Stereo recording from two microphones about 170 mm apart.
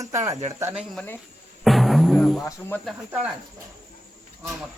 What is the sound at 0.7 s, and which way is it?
Speech, 5° right (ahead or behind).